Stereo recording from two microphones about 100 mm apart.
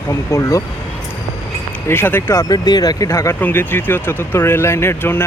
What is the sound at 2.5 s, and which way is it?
Speech, 40° left (ahead or behind).